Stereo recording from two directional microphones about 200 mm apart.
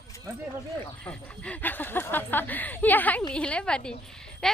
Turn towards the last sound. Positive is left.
turn(degrees=5)  # may be behind; listen again after turning